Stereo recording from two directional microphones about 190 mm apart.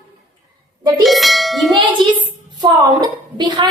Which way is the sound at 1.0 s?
Centre (ahead or behind).